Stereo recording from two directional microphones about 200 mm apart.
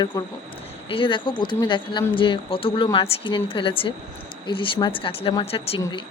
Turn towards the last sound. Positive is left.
turn(degrees=30)  # may be behind; listen again after turning